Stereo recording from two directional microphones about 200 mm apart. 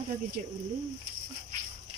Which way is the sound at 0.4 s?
40° right (ahead or behind).